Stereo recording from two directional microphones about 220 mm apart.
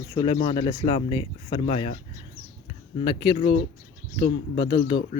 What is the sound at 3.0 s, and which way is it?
Speech, 25° left (ahead or behind).